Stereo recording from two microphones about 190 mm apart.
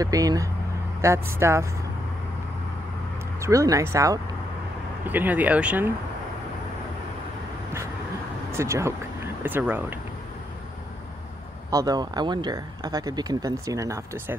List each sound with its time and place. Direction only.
0.0 s speech: 20° right (ahead or behind)
3.3 s speech: 15° right (ahead or behind)
8.5 s speech: 15° right (ahead or behind)
11.7 s speech: 20° right (ahead or behind)